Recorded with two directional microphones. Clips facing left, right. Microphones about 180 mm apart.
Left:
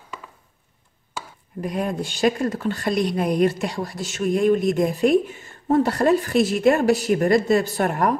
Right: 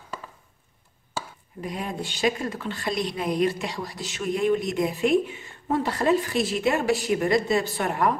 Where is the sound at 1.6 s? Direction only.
50° left (ahead or behind).